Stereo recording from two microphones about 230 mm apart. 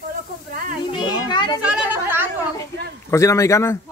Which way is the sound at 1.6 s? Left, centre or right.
Centre.